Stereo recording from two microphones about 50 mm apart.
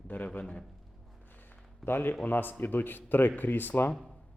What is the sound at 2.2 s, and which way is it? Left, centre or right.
Speech, left.